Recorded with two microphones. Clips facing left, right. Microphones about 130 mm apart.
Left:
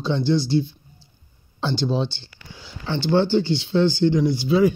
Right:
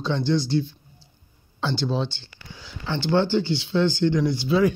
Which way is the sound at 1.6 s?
15° left (ahead or behind).